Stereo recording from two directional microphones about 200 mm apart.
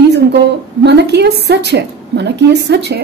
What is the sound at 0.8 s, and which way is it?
Speech, 55° right (ahead or behind).